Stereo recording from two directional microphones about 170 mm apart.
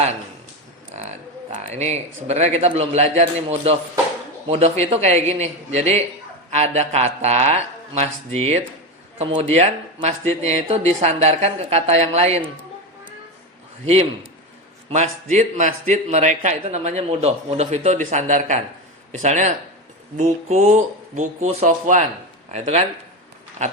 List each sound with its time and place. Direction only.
0.9 s a sound: 40° right (ahead or behind)
1.5 s speech: 40° right (ahead or behind)
13.8 s a man's voice: 35° right (ahead or behind)
22.5 s a man's voice: 40° right (ahead or behind)